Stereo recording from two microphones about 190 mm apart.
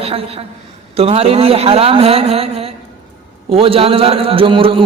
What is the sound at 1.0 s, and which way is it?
A man's voice, 30° right (ahead or behind).